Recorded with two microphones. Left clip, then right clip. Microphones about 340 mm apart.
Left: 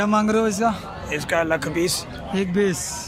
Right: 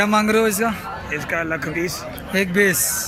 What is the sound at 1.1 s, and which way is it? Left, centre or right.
Speech, left.